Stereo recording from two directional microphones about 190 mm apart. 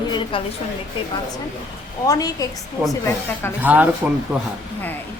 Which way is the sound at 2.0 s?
20° left (ahead or behind).